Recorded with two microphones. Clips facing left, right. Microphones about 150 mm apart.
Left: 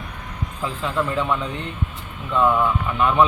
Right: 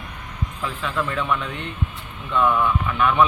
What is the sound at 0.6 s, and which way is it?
A man's voice, 25° left (ahead or behind).